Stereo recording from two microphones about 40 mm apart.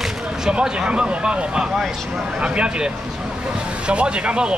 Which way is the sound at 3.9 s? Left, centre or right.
Right.